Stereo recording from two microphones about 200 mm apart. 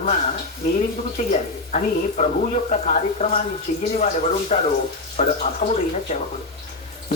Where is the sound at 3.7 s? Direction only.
50° left (ahead or behind).